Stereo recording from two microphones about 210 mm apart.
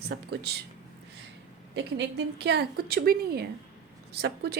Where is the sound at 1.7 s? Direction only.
60° right (ahead or behind).